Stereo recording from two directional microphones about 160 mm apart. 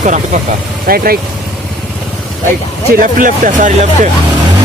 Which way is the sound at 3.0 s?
55° right (ahead or behind).